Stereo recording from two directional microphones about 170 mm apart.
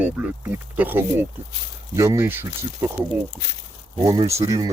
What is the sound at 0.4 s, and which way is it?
Speech, 10° right (ahead or behind).